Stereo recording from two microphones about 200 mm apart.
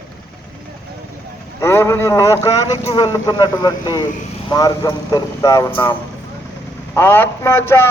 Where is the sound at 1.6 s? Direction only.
15° left (ahead or behind).